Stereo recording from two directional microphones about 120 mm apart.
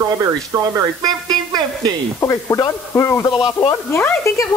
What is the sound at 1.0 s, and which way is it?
Speech, 35° right (ahead or behind).